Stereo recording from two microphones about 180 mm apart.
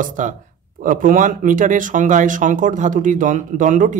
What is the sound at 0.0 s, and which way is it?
Speech, 45° right (ahead or behind).